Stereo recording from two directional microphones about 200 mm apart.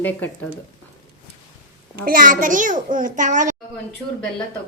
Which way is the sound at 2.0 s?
45° right (ahead or behind).